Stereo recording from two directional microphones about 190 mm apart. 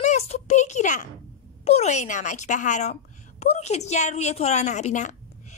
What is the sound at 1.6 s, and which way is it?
A woman's voice, 35° left (ahead or behind).